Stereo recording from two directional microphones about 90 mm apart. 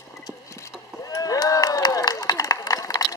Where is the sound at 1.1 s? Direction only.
40° left (ahead or behind).